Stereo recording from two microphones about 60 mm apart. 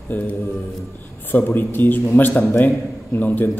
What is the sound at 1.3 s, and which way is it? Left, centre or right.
A man's voice, left.